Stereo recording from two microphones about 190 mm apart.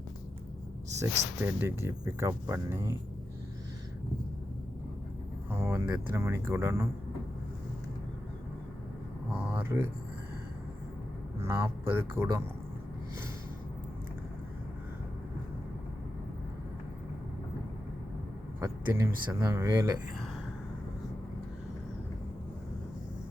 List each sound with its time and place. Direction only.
1.4 s speech: 10° right (ahead or behind)
5.5 s speech: 15° right (ahead or behind)
9.3 s a sound: 10° right (ahead or behind)
11.3 s speech: 15° right (ahead or behind)
18.6 s speech: 15° right (ahead or behind)